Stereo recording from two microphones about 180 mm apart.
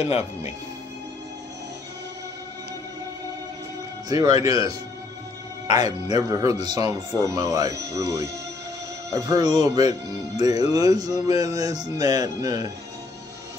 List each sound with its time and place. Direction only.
4.1 s speech: 20° right (ahead or behind)